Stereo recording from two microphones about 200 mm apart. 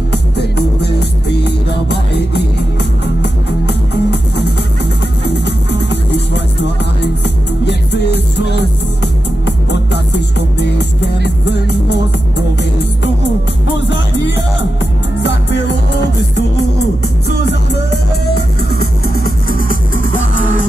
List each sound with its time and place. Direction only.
1.4 s music: 55° left (ahead or behind)
7.6 s music: 60° left (ahead or behind)
9.7 s music: 60° left (ahead or behind)
13.8 s music: 65° left (ahead or behind)